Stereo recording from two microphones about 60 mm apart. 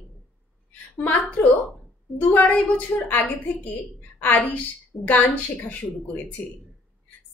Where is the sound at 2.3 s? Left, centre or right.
Left.